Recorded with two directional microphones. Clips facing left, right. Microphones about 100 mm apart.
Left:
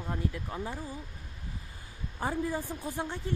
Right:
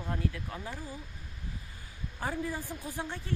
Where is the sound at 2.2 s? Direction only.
20° left (ahead or behind).